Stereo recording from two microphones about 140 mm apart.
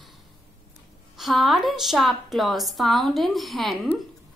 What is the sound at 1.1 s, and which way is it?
Speech, centre (ahead or behind).